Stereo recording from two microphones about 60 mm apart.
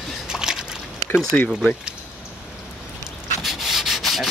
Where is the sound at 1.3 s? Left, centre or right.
Left.